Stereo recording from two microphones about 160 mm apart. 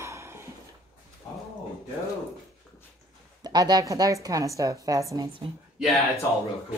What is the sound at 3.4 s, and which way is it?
A woman's voice, 25° right (ahead or behind).